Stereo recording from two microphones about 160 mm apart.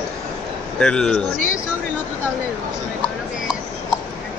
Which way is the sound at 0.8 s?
5° left (ahead or behind).